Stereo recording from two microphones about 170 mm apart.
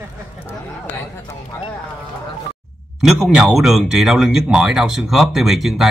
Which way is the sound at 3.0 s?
5° right (ahead or behind).